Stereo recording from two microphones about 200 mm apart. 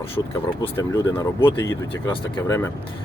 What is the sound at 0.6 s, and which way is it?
Speech, 15° left (ahead or behind).